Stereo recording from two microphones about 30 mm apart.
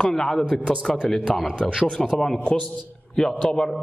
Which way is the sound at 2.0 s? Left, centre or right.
Centre.